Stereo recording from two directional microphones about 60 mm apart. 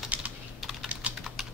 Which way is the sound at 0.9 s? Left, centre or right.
Right.